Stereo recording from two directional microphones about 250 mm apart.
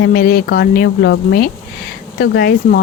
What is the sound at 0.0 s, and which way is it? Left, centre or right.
A woman's voice, left.